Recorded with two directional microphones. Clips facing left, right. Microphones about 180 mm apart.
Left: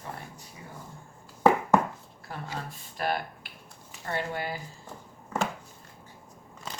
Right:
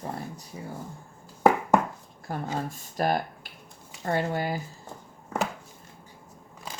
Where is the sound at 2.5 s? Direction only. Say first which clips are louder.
Right 7 dB; 45° right (ahead or behind).